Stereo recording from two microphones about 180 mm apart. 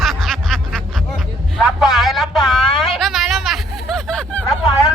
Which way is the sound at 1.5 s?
5° right (ahead or behind).